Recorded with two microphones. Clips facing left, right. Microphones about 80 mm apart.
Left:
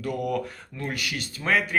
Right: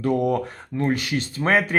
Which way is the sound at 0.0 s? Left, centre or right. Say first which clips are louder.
Right 6 dB; right.